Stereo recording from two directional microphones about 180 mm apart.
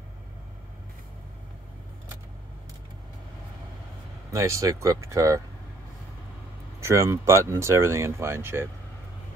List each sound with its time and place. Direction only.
4.3 s speech: 15° right (ahead or behind)
6.8 s speech: 15° right (ahead or behind)